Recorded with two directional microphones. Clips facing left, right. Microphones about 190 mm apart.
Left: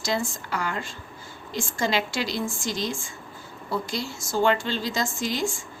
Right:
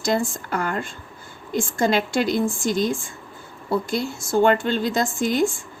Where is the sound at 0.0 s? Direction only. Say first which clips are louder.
Right 5 dB; 55° right (ahead or behind).